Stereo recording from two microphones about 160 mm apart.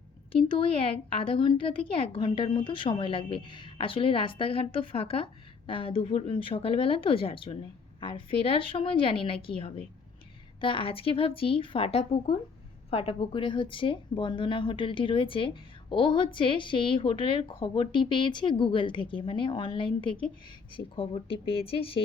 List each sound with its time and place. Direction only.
0.4 s speech: 30° left (ahead or behind)